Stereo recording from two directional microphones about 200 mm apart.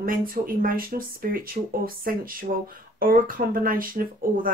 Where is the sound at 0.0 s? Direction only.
45° right (ahead or behind).